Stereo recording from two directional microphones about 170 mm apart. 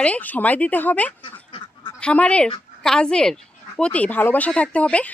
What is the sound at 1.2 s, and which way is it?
Duck, 30° left (ahead or behind).